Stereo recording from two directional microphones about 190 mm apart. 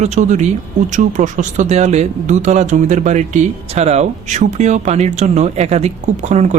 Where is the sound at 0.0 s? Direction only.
40° right (ahead or behind).